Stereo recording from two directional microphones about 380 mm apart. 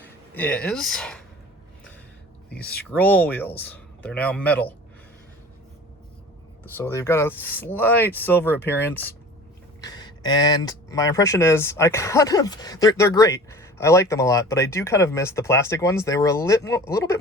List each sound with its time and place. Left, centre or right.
0.0 s speech: centre
2.5 s speech: left
2.9 s speech: centre
6.7 s speech: centre